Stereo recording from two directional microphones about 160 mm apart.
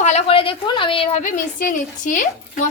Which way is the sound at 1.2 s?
55° left (ahead or behind).